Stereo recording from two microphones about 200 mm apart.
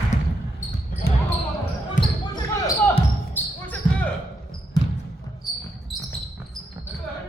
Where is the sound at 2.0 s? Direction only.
20° left (ahead or behind).